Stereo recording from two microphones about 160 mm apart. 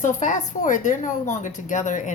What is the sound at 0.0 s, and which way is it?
A woman's voice, 50° left (ahead or behind).